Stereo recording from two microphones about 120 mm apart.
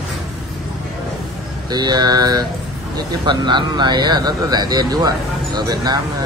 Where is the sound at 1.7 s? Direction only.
35° right (ahead or behind).